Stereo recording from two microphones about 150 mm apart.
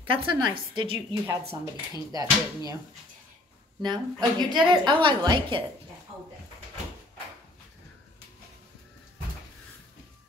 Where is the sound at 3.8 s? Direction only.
30° right (ahead or behind).